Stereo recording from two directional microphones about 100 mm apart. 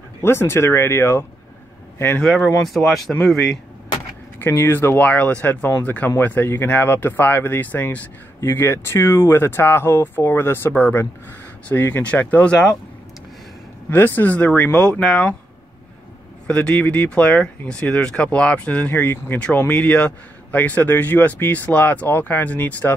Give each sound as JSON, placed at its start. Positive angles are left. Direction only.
{"t": 0.2, "sound": "speech", "side_deg": 25}
{"t": 2.2, "sound": "speech", "side_deg": 5}
{"t": 4.4, "sound": "speech", "side_deg": 25}
{"t": 13.8, "sound": "speech", "side_deg": 20}
{"t": 16.4, "sound": "speech", "side_deg": 10}